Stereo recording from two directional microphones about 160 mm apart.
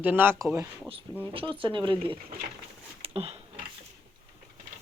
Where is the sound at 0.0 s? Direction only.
10° right (ahead or behind).